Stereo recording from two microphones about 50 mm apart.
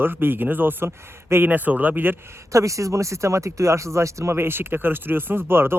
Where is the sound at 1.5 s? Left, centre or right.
Right.